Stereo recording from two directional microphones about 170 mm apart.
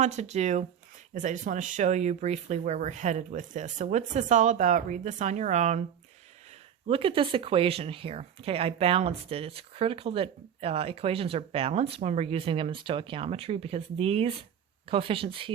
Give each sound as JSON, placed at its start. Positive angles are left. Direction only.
{"t": 0.0, "sound": "speech", "side_deg": -40}
{"t": 6.8, "sound": "speech", "side_deg": -35}